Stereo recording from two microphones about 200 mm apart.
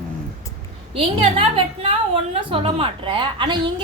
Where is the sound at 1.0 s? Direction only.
30° right (ahead or behind).